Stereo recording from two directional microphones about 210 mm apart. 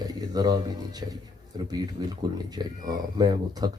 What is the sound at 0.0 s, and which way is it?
Speech, 20° right (ahead or behind).